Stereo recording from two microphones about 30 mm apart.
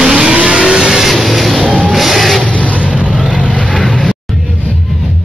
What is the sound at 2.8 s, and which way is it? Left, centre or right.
Vehicle, right.